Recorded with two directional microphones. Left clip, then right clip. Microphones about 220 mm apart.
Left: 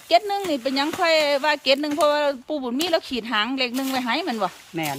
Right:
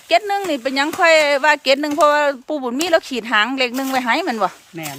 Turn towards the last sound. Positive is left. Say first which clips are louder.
# left 3 dB
turn(degrees=15)  # may be behind; listen again after turning